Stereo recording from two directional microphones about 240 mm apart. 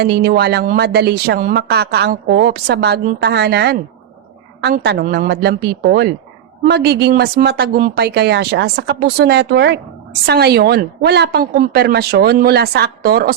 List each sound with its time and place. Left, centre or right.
0.0 s a woman's voice: right